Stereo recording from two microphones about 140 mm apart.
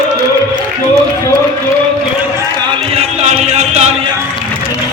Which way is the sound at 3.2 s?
55° right (ahead or behind).